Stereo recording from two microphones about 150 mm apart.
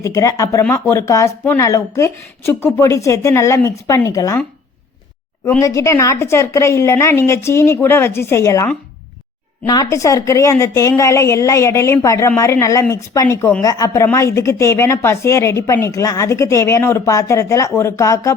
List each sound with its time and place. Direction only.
0.0 s a woman's voice: 20° left (ahead or behind)
5.5 s a woman's voice: 20° left (ahead or behind)